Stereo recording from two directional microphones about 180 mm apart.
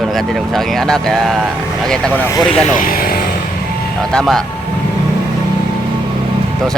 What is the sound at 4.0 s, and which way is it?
Speech, 5° left (ahead or behind).